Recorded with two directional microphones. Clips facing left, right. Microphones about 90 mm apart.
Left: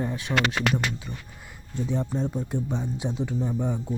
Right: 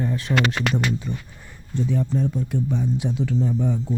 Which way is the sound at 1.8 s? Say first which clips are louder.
Right 4 dB; 20° left (ahead or behind).